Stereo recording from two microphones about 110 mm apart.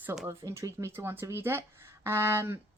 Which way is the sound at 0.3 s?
30° right (ahead or behind).